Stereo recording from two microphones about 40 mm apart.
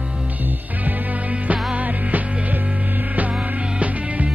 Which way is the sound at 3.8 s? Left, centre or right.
Right.